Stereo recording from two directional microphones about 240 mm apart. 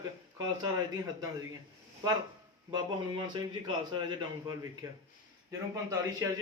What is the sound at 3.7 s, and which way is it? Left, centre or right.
A man's voice, centre.